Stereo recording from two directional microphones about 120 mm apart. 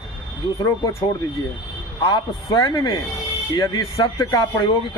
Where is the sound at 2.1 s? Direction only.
35° left (ahead or behind).